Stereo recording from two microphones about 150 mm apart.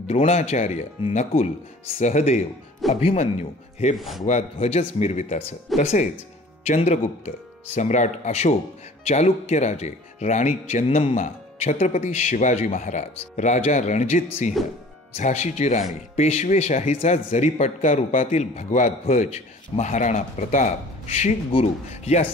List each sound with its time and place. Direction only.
0.0 s a man's voice: 45° left (ahead or behind)
3.9 s speech: centre (ahead or behind)
4.2 s a man's voice: 45° left (ahead or behind)
16.3 s a man's voice: 45° left (ahead or behind)